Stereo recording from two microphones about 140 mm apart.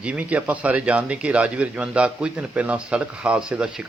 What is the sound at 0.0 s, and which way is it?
Speech, 10° right (ahead or behind).